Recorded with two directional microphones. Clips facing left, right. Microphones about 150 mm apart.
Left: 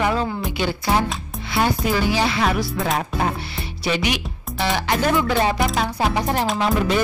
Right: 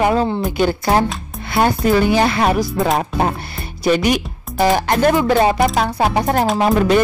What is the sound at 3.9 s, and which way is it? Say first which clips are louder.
Speech: right 7 dB; 45° right (ahead or behind).